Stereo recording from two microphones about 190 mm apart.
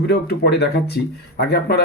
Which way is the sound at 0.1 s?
60° left (ahead or behind).